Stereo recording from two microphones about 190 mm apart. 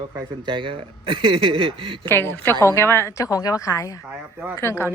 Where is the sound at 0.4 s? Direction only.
25° right (ahead or behind).